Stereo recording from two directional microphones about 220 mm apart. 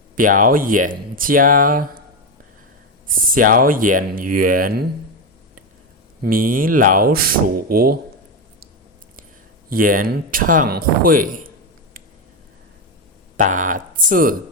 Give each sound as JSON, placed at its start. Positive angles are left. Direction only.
{"t": 0.2, "sound": "speech", "side_deg": -40}
{"t": 3.1, "sound": "speech", "side_deg": -40}
{"t": 6.2, "sound": "speech", "side_deg": -40}
{"t": 9.6, "sound": "speech", "side_deg": -40}
{"t": 13.3, "sound": "speech", "side_deg": -35}